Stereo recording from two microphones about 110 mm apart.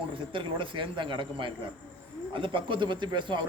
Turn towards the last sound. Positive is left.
turn(degrees=-45)  # may be behind; listen again after turning